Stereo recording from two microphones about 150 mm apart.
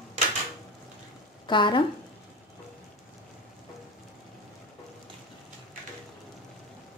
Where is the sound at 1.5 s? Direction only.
30° left (ahead or behind).